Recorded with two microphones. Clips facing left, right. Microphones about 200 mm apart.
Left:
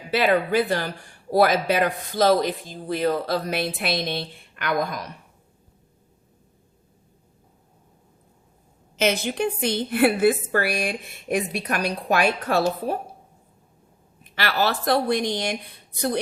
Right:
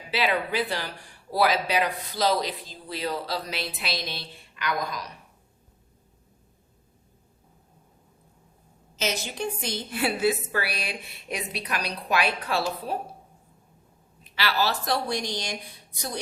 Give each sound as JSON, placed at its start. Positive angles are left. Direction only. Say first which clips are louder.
{"t": 0.1, "sound": "a woman's voice", "louder": "left 6 dB", "side_deg": 50}
{"t": 9.0, "sound": "a woman's voice", "louder": "left 7 dB", "side_deg": 60}
{"t": 14.3, "sound": "a woman's voice", "louder": "left 3 dB", "side_deg": 50}